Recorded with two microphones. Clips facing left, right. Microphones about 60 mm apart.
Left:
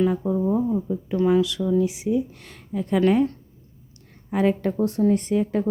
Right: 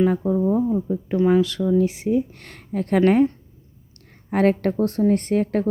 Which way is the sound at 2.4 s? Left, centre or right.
Right.